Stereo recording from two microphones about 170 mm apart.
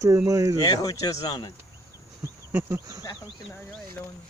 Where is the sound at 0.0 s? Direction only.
20° right (ahead or behind).